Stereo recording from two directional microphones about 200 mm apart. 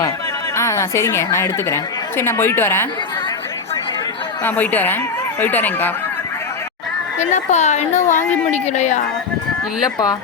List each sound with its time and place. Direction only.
0.5 s a woman's voice: 15° left (ahead or behind)
4.4 s speech: 10° left (ahead or behind)
7.2 s a woman's voice: 35° left (ahead or behind)
9.8 s speech: 20° left (ahead or behind)